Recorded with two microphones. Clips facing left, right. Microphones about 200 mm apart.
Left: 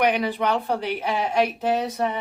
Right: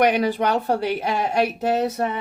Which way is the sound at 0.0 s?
45° right (ahead or behind).